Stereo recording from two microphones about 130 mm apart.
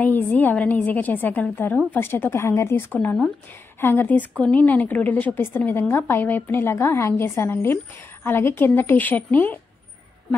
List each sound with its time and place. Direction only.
0.0 s a woman's voice: 15° left (ahead or behind)
3.8 s a woman's voice: 15° left (ahead or behind)